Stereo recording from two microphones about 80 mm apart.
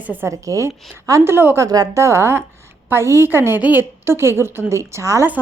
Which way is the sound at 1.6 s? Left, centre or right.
Right.